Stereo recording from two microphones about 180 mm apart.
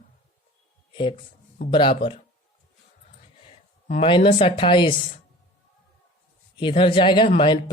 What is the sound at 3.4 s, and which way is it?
A woman's voice, 35° left (ahead or behind).